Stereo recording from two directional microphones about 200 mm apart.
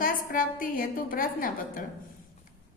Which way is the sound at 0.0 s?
45° left (ahead or behind).